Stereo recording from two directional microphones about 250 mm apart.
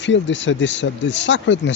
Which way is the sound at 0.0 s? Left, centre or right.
Left.